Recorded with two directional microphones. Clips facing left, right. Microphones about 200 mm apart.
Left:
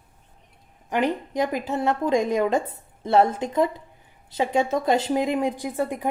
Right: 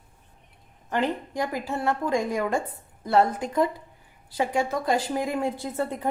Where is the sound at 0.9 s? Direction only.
15° left (ahead or behind).